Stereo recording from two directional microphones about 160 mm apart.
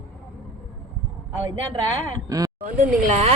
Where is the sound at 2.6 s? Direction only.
50° right (ahead or behind).